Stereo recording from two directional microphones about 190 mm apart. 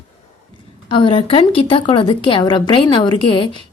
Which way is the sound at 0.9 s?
25° left (ahead or behind).